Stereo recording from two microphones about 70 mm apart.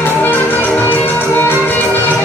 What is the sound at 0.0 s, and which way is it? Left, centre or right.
Music, left.